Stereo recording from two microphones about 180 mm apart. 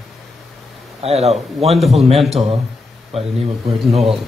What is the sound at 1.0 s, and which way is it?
Speech, 35° right (ahead or behind).